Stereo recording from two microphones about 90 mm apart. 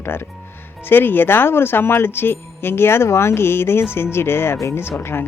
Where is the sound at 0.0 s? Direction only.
25° left (ahead or behind).